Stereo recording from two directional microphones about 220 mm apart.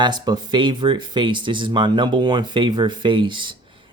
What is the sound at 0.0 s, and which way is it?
Speech, 20° right (ahead or behind).